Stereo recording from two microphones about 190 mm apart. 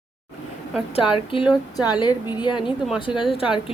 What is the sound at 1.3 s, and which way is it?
A woman's voice, 30° left (ahead or behind).